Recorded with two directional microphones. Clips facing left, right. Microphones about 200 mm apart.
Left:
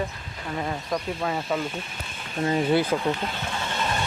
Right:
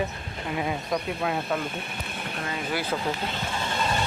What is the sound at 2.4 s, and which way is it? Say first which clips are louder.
Speech: left 10 dB; 25° left (ahead or behind).